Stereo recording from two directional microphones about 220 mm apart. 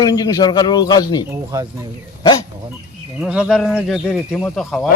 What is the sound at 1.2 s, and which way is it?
Speech, 15° right (ahead or behind).